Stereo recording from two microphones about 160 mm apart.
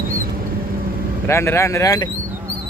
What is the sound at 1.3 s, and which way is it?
Speech, 15° left (ahead or behind).